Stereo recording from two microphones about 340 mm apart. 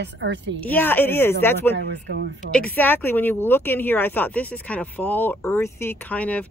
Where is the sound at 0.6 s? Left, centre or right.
Centre.